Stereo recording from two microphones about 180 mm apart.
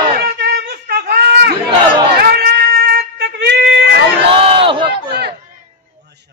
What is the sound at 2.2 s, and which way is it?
Cat, 60° right (ahead or behind).